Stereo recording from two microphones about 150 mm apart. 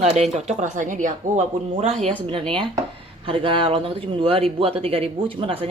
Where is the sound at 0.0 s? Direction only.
45° right (ahead or behind).